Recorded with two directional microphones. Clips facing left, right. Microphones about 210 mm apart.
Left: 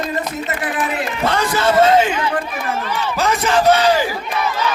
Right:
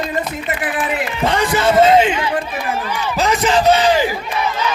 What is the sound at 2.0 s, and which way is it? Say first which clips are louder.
Speech: right 1 dB; 25° right (ahead or behind).